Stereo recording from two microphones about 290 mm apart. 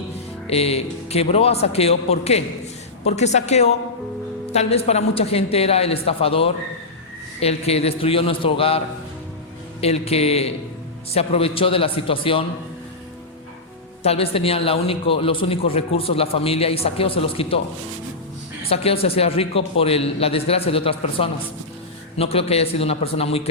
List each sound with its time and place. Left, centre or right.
0.5 s a man's voice: left
9.8 s a man's voice: left
14.0 s a man's voice: left
18.7 s a man's voice: centre